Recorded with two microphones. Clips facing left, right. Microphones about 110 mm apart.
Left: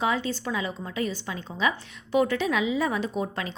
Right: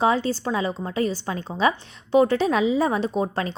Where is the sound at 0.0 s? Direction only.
35° right (ahead or behind).